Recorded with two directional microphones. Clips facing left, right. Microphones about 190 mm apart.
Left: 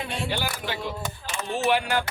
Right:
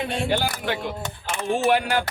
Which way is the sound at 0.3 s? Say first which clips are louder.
Right 5 dB; 50° right (ahead or behind).